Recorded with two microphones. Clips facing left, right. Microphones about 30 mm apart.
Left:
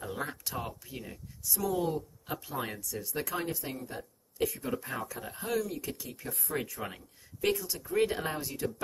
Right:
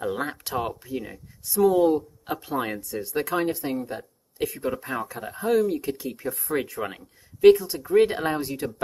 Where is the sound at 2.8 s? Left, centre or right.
Right.